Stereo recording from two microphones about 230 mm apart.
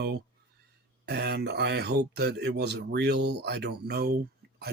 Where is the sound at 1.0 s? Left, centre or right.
Right.